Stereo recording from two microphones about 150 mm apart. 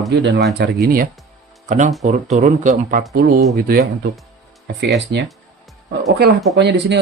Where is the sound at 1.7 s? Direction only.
55° right (ahead or behind).